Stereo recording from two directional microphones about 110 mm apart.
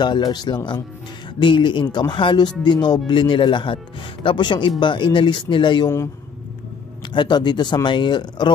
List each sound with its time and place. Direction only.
0.0 s speech: 40° left (ahead or behind)
7.1 s speech: 40° left (ahead or behind)